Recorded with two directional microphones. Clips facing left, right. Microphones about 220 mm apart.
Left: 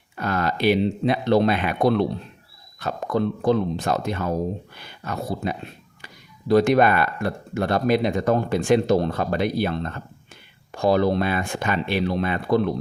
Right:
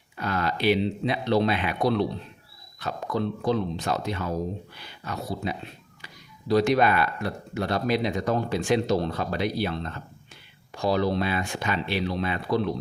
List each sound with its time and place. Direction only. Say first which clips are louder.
0.2 s speech: left 4 dB; 50° left (ahead or behind)